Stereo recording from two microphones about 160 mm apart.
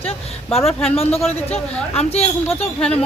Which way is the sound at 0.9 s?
40° left (ahead or behind).